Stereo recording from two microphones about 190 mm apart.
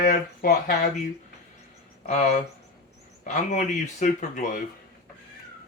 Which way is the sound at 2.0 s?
40° left (ahead or behind).